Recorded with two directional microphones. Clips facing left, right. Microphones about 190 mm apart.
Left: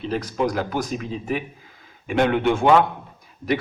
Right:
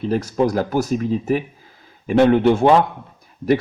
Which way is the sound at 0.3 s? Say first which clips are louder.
Right 5 dB; 40° right (ahead or behind).